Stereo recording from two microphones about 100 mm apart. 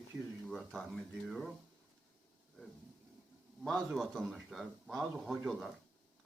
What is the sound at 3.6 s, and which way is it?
Speech, centre (ahead or behind).